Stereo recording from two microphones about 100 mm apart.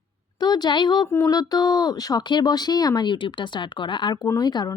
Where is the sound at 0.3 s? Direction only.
45° left (ahead or behind).